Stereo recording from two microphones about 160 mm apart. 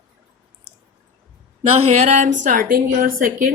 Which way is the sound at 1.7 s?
40° right (ahead or behind).